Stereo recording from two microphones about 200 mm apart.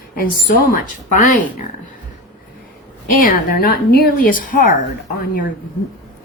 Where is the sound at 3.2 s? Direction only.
45° left (ahead or behind).